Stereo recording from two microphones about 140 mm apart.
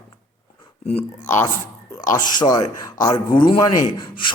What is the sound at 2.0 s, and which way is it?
A man's voice, 30° left (ahead or behind).